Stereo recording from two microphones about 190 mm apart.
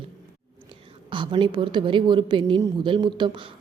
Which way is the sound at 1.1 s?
25° right (ahead or behind).